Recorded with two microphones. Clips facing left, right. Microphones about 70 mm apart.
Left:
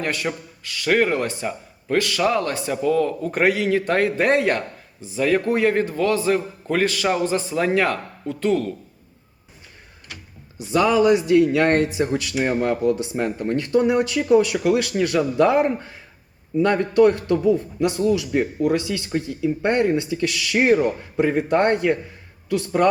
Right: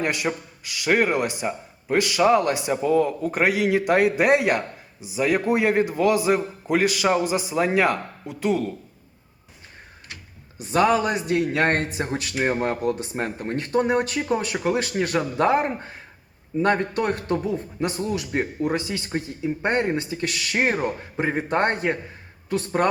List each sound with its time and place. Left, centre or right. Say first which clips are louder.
0.0 s a man's voice: even; centre
3.2 s a man's voice: left 1 dB; centre
10.6 s speech: left 2 dB; right
11.3 s speech: left 5 dB; right
18.9 s speech: left 3 dB; right
20.2 s speech: left 5 dB; right